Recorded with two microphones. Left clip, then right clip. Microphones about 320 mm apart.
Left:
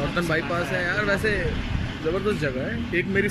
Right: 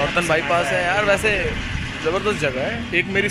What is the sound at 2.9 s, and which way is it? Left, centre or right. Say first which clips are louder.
Speech: right 4 dB; centre.